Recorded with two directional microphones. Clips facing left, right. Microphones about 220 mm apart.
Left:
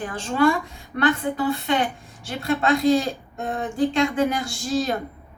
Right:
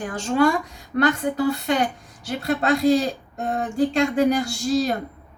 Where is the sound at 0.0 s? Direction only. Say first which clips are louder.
Right 1 dB; 45° right (ahead or behind).